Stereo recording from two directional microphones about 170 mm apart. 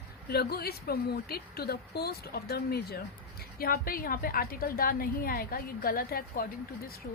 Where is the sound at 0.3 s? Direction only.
65° left (ahead or behind).